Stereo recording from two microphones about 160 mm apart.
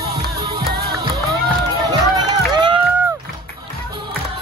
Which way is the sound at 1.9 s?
25° right (ahead or behind).